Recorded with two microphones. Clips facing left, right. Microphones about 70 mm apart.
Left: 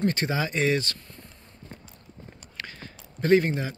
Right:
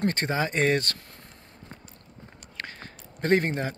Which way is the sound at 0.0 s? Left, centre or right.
Right.